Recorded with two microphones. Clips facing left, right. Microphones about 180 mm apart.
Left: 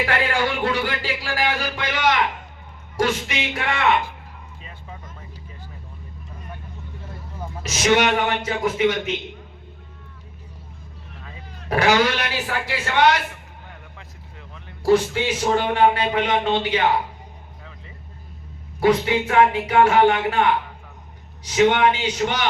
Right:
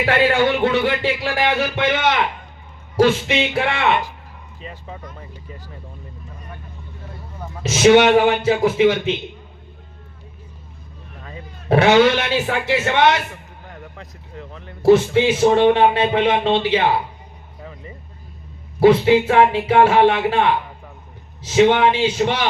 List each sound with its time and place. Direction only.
0.0 s speech: 25° right (ahead or behind)
4.6 s vehicle: 35° right (ahead or behind)
7.6 s speech: 25° right (ahead or behind)
11.7 s speech: 25° right (ahead or behind)
13.7 s vehicle: 40° right (ahead or behind)
14.8 s speech: 25° right (ahead or behind)
18.8 s speech: 25° right (ahead or behind)